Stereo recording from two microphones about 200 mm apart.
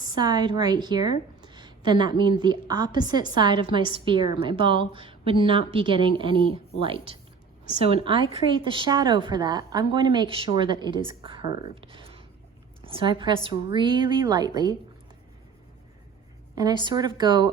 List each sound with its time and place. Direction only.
0.2 s a woman's voice: 20° right (ahead or behind)
16.6 s a woman's voice: 20° right (ahead or behind)